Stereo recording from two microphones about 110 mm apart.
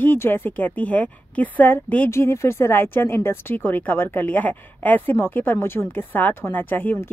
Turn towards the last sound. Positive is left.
turn(degrees=20)  # may be behind; listen again after turning